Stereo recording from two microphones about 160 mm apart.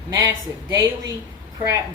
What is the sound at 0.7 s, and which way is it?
Speech, 20° right (ahead or behind).